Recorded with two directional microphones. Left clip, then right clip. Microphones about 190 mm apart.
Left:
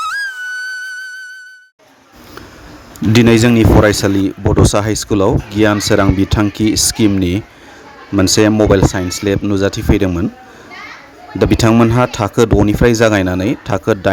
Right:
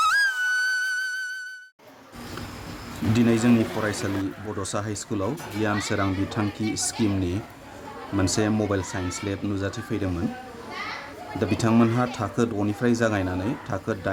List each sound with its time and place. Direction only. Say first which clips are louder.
0.0 s music: left 1 dB; centre (ahead or behind)
3.1 s speech: left 12 dB; 50° left (ahead or behind)
11.3 s speech: left 12 dB; 50° left (ahead or behind)